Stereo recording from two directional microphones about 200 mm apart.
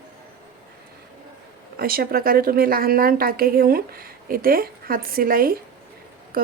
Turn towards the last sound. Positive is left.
turn(degrees=-45)  # may be behind; listen again after turning